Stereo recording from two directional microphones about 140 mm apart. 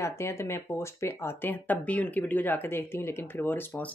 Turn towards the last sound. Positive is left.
turn(degrees=15)  # may be behind; listen again after turning